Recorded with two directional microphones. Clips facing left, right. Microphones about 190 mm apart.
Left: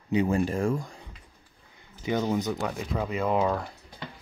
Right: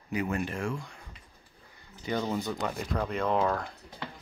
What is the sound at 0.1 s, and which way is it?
Speech, 30° left (ahead or behind).